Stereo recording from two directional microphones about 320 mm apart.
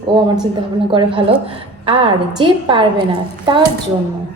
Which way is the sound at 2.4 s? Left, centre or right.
Centre.